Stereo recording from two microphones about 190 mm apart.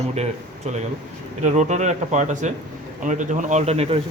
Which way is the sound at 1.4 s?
40° right (ahead or behind).